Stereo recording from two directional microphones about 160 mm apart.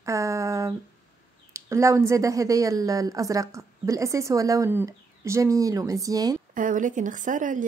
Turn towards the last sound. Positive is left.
turn(degrees=-55)  # may be behind; listen again after turning